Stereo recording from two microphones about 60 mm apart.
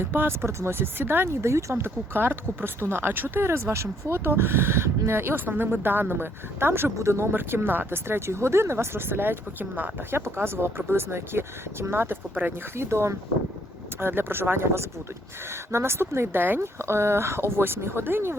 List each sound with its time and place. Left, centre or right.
0.0 s speech: right
10.2 s speech: right
12.3 s speech: right
12.7 s speech: right
16.6 s speech: right